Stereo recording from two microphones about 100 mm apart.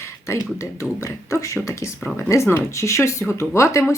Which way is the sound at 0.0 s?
30° left (ahead or behind).